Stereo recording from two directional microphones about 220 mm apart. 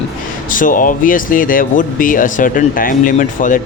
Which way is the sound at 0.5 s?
35° left (ahead or behind).